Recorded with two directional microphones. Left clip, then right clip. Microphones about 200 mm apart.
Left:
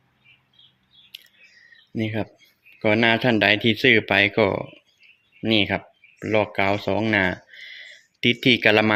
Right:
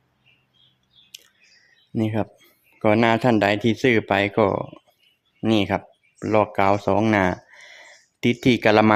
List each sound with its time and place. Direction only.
2.0 s speech: 10° right (ahead or behind)